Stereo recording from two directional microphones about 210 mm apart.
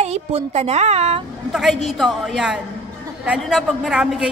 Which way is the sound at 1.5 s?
Centre (ahead or behind).